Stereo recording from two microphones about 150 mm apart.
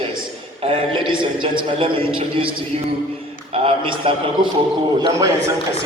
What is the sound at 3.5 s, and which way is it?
A man's voice, 35° right (ahead or behind).